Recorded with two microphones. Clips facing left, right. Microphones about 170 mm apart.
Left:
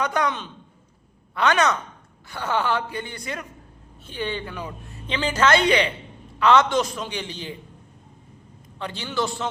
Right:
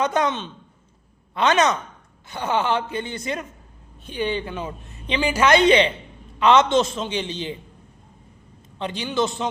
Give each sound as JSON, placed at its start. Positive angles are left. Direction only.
{"t": 0.0, "sound": "a woman's voice", "side_deg": -20}
{"t": 8.8, "sound": "speech", "side_deg": -20}